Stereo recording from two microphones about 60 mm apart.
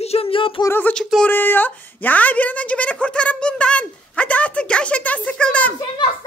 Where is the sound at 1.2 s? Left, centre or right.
Left.